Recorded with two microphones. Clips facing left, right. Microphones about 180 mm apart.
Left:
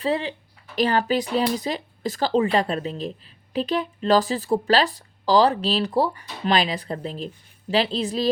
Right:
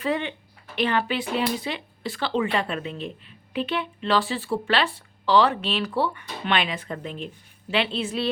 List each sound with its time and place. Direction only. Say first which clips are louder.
0.0 s speech: left 2 dB; 30° left (ahead or behind)